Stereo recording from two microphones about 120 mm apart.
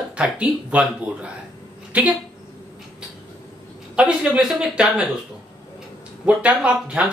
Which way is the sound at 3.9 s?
10° right (ahead or behind).